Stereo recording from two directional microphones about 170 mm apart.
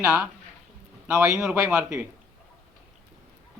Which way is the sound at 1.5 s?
15° right (ahead or behind).